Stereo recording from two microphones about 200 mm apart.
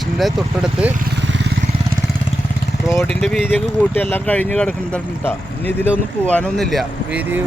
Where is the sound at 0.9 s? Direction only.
55° right (ahead or behind).